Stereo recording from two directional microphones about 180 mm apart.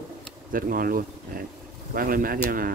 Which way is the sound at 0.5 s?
50° right (ahead or behind).